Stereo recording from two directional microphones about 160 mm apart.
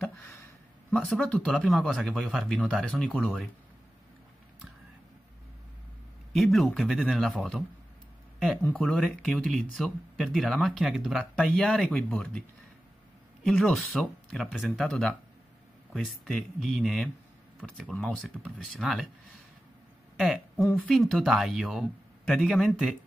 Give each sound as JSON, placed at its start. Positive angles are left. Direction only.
{"t": 0.0, "sound": "a sound", "side_deg": 15}
{"t": 0.9, "sound": "speech", "side_deg": 0}
{"t": 6.3, "sound": "speech", "side_deg": 0}
{"t": 8.6, "sound": "speech", "side_deg": 5}
{"t": 20.2, "sound": "speech", "side_deg": 0}